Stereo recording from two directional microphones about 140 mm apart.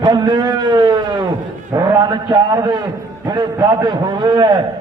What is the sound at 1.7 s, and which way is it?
A man's voice, 30° right (ahead or behind).